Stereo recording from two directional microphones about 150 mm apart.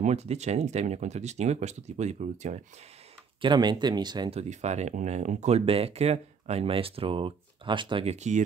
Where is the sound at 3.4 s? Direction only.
30° right (ahead or behind).